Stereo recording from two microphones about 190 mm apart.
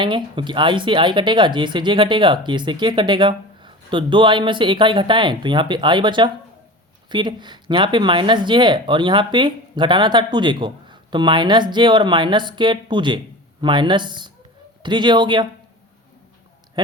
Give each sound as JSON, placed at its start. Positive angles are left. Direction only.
{"t": 0.0, "sound": "speech", "side_deg": -25}
{"t": 16.8, "sound": "speech", "side_deg": -20}